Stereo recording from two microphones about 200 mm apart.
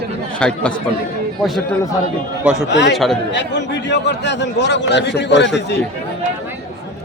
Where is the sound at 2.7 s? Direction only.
60° left (ahead or behind).